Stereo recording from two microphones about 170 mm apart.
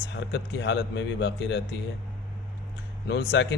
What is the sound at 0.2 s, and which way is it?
Speech, 90° left.